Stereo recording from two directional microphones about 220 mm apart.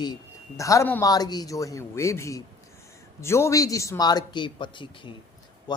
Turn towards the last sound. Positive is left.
turn(degrees=20)  # may be behind; listen again after turning